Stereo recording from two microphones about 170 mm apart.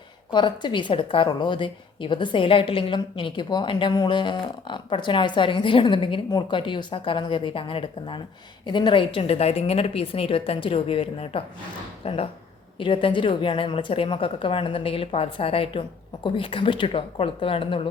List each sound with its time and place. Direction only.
0.3 s a woman's voice: 25° left (ahead or behind)